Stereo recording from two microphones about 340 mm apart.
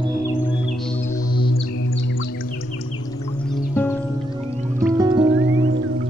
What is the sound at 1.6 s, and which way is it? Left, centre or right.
Music, left.